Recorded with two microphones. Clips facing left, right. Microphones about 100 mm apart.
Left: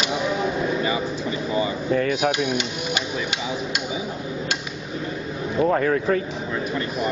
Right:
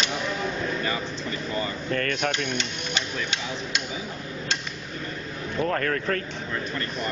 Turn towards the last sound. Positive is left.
turn(degrees=10)  # may be behind; listen again after turning